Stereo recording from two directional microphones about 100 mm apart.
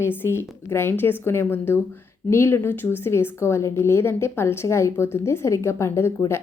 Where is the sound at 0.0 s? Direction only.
20° left (ahead or behind).